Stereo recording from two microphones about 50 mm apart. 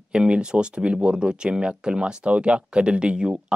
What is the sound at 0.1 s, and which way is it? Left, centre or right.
Speech, centre.